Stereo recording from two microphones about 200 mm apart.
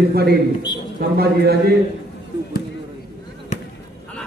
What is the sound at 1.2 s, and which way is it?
Speech, 50° right (ahead or behind).